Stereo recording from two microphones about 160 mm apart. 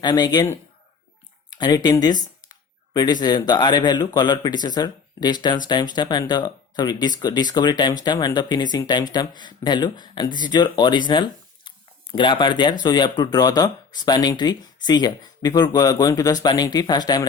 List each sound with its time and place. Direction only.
0.0 s speech: 25° left (ahead or behind)
1.5 s speech: 25° left (ahead or behind)